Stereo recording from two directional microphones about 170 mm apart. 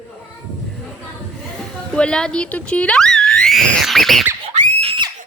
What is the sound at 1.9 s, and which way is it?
Speech, 5° left (ahead or behind).